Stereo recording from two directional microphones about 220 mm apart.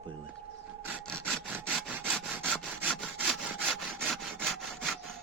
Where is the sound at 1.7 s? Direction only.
5° right (ahead or behind).